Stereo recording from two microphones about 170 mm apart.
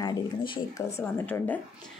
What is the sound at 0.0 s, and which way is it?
Speech, 25° left (ahead or behind).